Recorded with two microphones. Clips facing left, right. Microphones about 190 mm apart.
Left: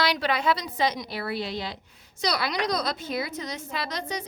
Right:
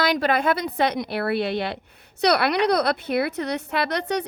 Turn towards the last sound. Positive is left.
turn(degrees=-65)  # may be behind; listen again after turning